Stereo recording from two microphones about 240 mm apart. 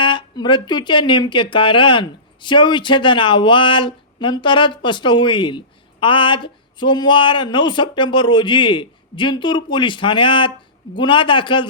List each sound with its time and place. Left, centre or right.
0.0 s speech: centre